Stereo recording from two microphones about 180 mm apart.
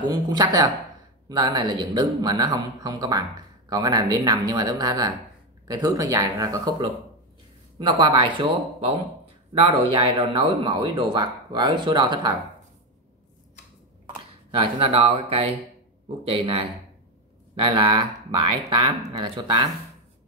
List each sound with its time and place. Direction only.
0.1 s speech: 20° right (ahead or behind)
8.0 s speech: 25° right (ahead or behind)
14.6 s speech: 30° right (ahead or behind)